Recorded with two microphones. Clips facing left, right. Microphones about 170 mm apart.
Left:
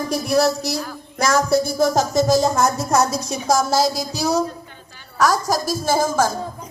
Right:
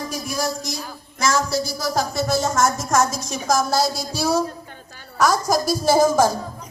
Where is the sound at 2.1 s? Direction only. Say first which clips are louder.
Left 8 dB; 20° left (ahead or behind).